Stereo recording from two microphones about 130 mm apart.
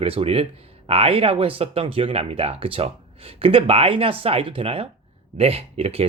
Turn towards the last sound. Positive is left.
turn(degrees=-50)  # may be behind; listen again after turning